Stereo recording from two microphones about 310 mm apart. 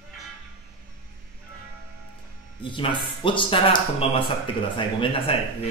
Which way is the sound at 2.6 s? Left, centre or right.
Centre.